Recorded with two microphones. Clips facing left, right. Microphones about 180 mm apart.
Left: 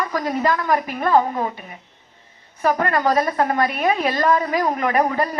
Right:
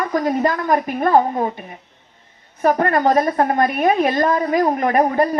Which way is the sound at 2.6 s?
50° right (ahead or behind).